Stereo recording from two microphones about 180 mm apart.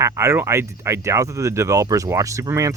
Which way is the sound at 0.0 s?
15° right (ahead or behind).